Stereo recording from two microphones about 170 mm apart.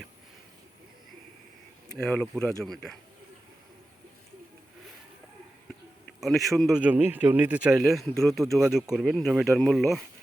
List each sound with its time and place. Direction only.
2.0 s speech: 5° left (ahead or behind)
6.1 s speech: centre (ahead or behind)